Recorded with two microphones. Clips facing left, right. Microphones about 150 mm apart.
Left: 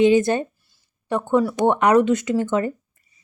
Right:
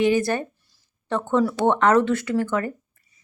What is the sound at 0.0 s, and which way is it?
Speech, 20° left (ahead or behind).